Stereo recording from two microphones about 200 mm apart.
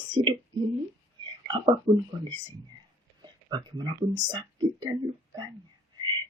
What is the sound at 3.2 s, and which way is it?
Speech, 20° right (ahead or behind).